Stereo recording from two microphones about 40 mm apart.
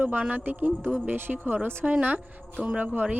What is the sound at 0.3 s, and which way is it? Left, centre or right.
Speech, right.